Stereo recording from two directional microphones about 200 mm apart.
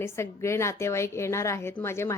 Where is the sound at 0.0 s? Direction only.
15° left (ahead or behind).